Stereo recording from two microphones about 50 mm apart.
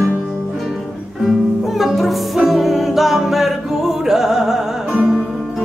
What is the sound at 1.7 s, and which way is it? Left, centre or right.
Music, centre.